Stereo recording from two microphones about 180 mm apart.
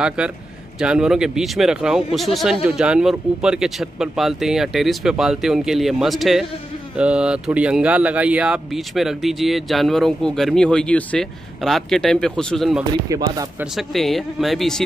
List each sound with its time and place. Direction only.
0.0 s speech: 5° right (ahead or behind)
13.1 s speech: 20° right (ahead or behind)
13.7 s speech: centre (ahead or behind)